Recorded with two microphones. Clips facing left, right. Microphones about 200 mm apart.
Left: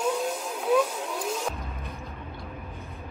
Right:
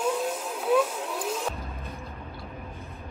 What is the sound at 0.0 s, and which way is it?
Vehicle, centre (ahead or behind).